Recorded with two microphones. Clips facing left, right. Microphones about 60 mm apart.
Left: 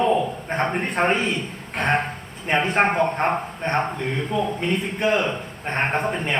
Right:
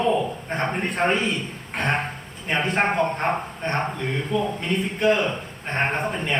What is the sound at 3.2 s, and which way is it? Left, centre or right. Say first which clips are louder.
Speech: left 2 dB; left.